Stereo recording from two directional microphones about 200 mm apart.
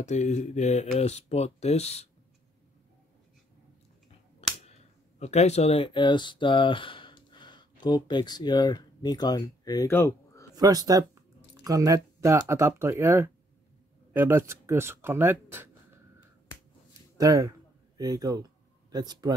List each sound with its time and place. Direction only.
0.0 s speech: 35° left (ahead or behind)
4.4 s a sound: 30° left (ahead or behind)
5.2 s speech: 35° left (ahead or behind); by 10.4 s 10° left (ahead or behind)
10.5 s speech: 20° right (ahead or behind)
17.2 s speech: 15° right (ahead or behind)
17.9 s a sound: 20° right (ahead or behind)